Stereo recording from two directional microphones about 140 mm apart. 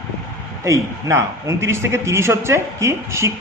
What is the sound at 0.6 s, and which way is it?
A man's voice, 20° right (ahead or behind).